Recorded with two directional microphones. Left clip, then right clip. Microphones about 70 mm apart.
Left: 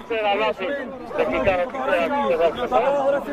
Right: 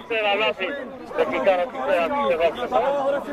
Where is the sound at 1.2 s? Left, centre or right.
Right.